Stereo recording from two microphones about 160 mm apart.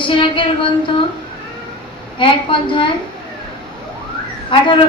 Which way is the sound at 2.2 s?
30° left (ahead or behind).